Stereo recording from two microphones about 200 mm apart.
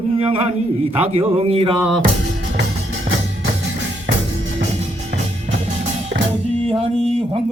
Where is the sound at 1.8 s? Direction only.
Centre (ahead or behind).